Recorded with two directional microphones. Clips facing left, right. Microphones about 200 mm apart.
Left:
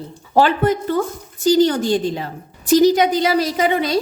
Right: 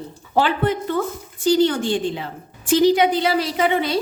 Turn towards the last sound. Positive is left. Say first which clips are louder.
# left 2 dB
turn(degrees=40)  # may be behind; listen again after turning